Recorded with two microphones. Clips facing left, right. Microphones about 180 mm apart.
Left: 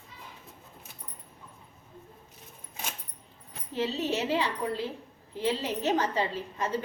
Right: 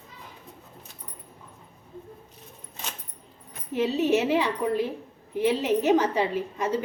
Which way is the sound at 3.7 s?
15° right (ahead or behind).